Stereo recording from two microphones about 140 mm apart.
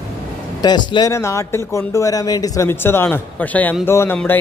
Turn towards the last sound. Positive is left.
turn(degrees=15)  # may be behind; listen again after turning